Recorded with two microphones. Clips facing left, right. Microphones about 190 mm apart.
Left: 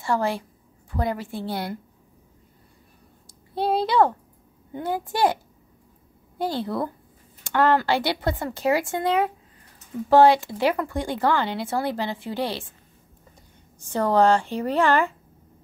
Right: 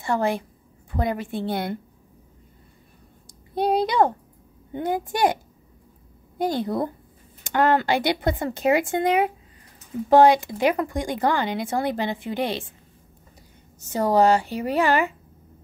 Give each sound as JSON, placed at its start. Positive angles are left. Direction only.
{"t": 0.0, "sound": "speech", "side_deg": -20}
{"t": 3.5, "sound": "a child's voice", "side_deg": -15}
{"t": 13.9, "sound": "speech", "side_deg": -10}